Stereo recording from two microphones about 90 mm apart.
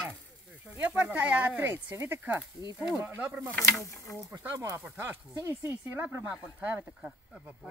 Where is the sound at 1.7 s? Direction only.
30° right (ahead or behind).